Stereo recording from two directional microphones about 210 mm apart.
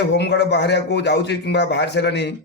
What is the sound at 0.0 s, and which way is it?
Speech, 55° left (ahead or behind).